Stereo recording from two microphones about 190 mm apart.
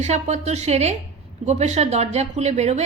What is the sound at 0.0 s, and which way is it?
A woman's voice, 35° right (ahead or behind).